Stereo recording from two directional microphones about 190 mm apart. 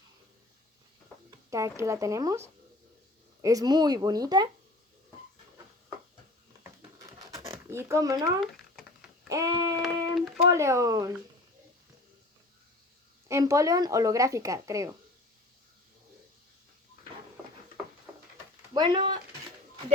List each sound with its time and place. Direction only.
1.3 s speech: 15° right (ahead or behind)
7.3 s a sound: 15° right (ahead or behind)
8.4 s a sound: 5° right (ahead or behind)
9.3 s speech: 20° right (ahead or behind)
13.2 s speech: 15° right (ahead or behind)
18.7 s speech: 25° right (ahead or behind)